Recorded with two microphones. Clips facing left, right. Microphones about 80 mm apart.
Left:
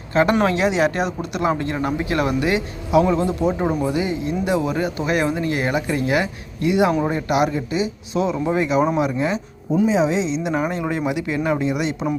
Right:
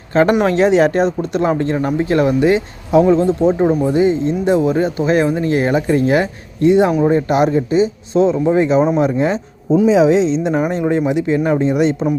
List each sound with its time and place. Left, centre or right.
0.1 s speech: right
9.8 s speech: right
10.1 s a woman's voice: right
10.6 s speech: right